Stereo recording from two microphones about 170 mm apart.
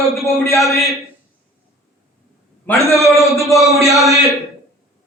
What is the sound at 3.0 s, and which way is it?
A man's voice, centre (ahead or behind).